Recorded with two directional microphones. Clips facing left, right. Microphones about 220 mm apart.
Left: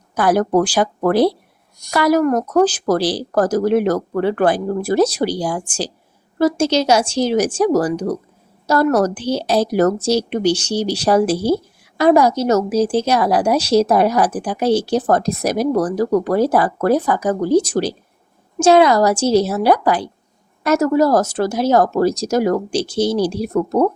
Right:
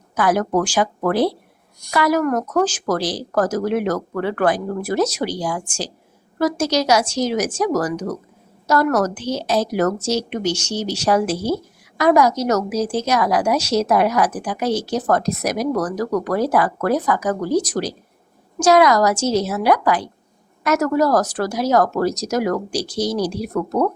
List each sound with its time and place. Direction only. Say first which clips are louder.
0.2 s a woman's voice: left 3 dB; 35° left (ahead or behind)